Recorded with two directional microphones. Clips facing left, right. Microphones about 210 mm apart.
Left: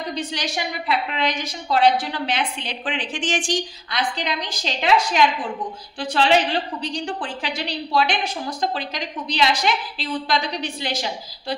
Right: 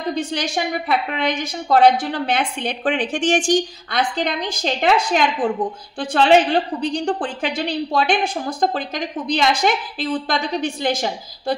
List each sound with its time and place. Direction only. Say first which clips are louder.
0.1 s a woman's voice: right 7 dB; 50° right (ahead or behind)